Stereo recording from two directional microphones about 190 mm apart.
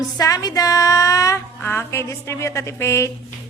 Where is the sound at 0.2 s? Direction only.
20° left (ahead or behind).